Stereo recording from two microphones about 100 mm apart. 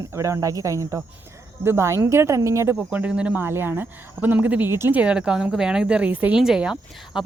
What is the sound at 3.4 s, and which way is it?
Speech, 25° right (ahead or behind).